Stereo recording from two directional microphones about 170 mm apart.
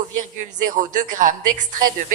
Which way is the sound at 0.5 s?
50° right (ahead or behind).